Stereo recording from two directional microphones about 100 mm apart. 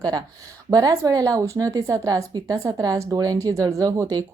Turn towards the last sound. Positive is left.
turn(degrees=-35)  # may be behind; listen again after turning